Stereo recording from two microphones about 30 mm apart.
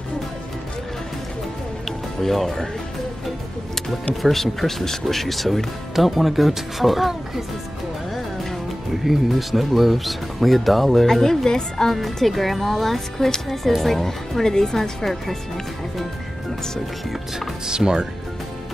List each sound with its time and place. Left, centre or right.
1.9 s music: centre
4.2 s speech: centre
9.0 s speech: centre
11.4 s speech: left
11.9 s speech: centre
14.4 s speech: centre
17.6 s speech: right